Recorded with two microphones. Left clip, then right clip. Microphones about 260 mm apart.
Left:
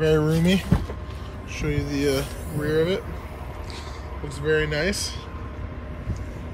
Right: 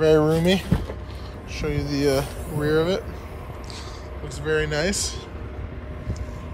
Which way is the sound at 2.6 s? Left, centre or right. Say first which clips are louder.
Right 1 dB; centre.